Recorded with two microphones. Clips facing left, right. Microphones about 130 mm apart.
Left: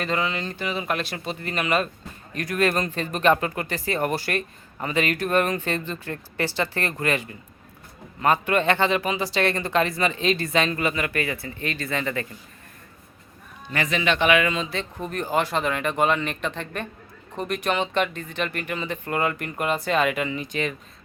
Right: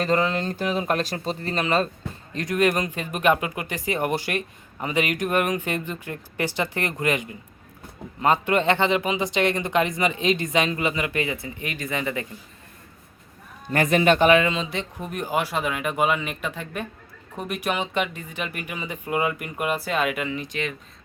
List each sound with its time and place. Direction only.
0.0 s speech: 40° right (ahead or behind); by 12.3 s 15° right (ahead or behind)
13.7 s speech: 50° right (ahead or behind)
14.4 s speech: 20° right (ahead or behind); by 20.7 s centre (ahead or behind)